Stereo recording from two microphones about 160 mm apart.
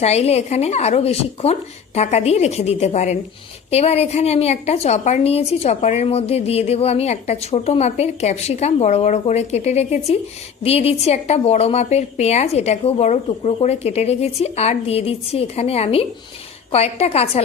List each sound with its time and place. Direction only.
0.0 s a woman's voice: 40° left (ahead or behind)